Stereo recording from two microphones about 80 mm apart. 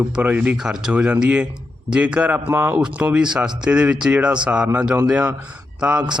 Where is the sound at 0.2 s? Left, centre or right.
Centre.